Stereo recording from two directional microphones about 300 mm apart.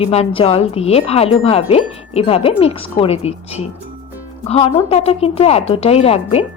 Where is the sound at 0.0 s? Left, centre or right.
Centre.